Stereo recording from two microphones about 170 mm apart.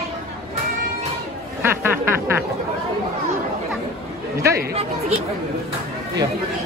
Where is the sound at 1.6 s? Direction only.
15° right (ahead or behind).